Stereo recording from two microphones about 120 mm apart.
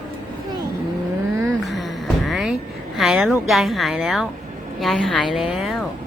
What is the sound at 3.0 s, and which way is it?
A woman's voice, centre (ahead or behind).